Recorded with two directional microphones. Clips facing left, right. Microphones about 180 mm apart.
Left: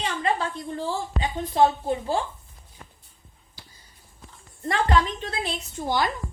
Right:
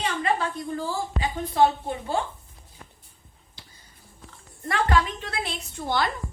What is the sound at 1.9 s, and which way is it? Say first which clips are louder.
Speech: left 2 dB; 30° left (ahead or behind).